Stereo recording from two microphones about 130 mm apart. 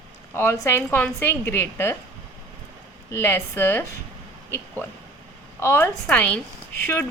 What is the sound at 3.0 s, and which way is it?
Speech, 20° left (ahead or behind).